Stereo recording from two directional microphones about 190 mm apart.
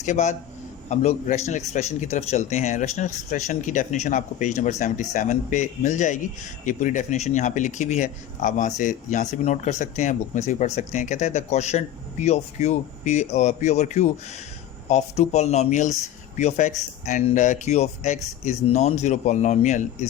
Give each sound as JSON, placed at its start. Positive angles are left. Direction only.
{"t": 0.0, "sound": "speech", "side_deg": 40}